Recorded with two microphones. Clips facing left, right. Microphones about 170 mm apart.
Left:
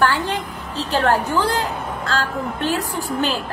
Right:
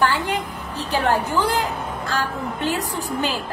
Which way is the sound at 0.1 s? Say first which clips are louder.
Left 1 dB; 15° right (ahead or behind).